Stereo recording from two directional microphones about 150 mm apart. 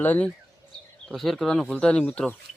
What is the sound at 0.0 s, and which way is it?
Speech, 10° left (ahead or behind).